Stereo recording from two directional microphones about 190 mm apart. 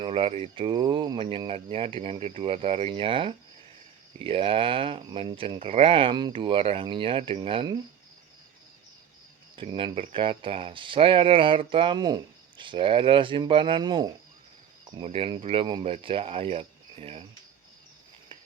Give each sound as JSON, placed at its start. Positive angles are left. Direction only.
{"t": 0.0, "sound": "speech", "side_deg": -30}
{"t": 9.6, "sound": "speech", "side_deg": -25}